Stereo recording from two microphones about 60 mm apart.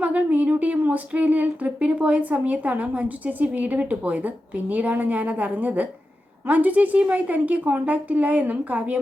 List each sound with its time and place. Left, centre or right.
0.0 s speech: right